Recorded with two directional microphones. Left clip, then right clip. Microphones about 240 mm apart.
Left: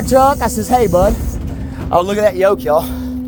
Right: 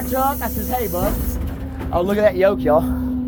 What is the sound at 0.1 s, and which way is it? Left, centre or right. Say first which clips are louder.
Speech: left 10 dB; left.